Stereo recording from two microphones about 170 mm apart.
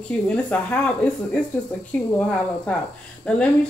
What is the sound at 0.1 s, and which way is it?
Speech, 5° left (ahead or behind).